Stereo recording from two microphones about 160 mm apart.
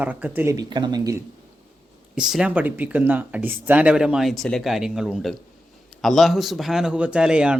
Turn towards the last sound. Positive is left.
turn(degrees=-5)  # may be behind; listen again after turning